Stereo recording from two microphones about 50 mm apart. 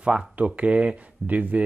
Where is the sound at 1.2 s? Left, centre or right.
Right.